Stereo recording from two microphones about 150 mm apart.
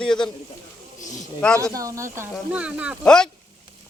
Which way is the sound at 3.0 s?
5° left (ahead or behind).